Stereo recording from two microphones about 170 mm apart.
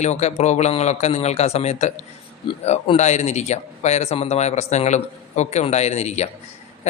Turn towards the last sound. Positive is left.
turn(degrees=40)  # may be behind; listen again after turning